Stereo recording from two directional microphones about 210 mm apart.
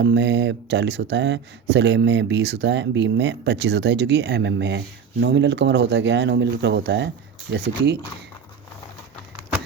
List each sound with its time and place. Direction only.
0.0 s speech: 55° right (ahead or behind)